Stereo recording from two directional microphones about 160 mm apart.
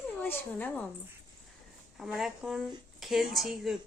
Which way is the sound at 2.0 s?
5° right (ahead or behind).